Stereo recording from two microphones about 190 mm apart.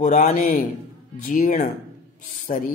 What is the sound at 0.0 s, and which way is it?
A man's voice, 40° left (ahead or behind).